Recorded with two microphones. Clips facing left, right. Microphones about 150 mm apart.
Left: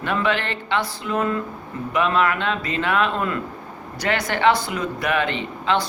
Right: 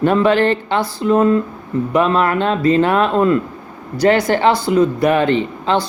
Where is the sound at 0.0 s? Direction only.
40° right (ahead or behind).